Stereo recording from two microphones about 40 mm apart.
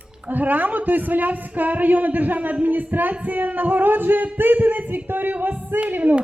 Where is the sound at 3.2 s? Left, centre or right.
Right.